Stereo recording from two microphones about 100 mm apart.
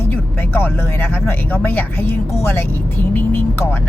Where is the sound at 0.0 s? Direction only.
20° left (ahead or behind).